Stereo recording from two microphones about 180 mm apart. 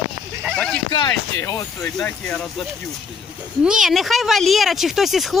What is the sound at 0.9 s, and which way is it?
Speech, 20° left (ahead or behind).